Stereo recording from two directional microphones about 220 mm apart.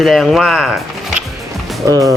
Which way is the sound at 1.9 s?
15° right (ahead or behind).